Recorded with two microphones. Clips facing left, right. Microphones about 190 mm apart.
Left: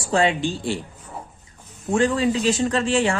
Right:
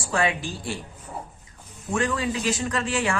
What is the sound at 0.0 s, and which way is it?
Speech, 25° left (ahead or behind).